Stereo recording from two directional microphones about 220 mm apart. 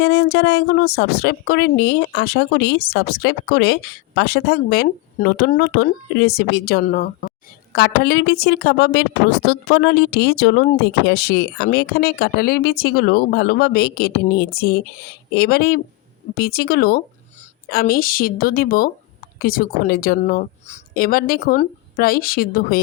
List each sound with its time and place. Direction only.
0.0 s a woman's voice: 50° left (ahead or behind)